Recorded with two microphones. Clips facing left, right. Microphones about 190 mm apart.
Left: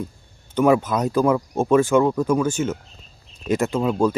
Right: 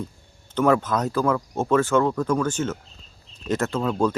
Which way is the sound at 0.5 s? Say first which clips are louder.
Left 3 dB; 10° left (ahead or behind).